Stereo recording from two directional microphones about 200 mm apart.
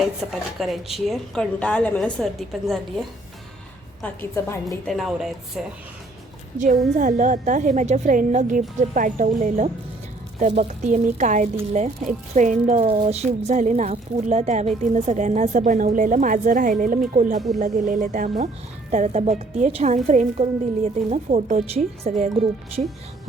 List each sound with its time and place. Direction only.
0.0 s speech: centre (ahead or behind)
4.0 s a woman's voice: 10° left (ahead or behind)
4.9 s speech: centre (ahead or behind)
6.9 s a woman's voice: 40° right (ahead or behind)